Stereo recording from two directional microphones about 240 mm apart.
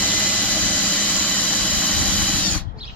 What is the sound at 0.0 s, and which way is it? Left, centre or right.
Vehicle, centre.